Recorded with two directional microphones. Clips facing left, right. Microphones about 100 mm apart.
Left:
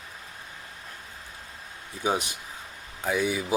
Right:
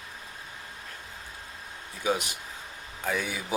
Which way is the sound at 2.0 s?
25° left (ahead or behind).